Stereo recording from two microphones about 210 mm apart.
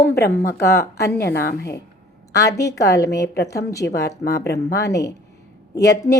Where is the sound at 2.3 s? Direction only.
15° left (ahead or behind).